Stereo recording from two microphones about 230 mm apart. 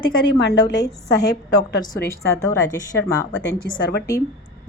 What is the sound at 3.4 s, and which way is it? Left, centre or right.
Speech, left.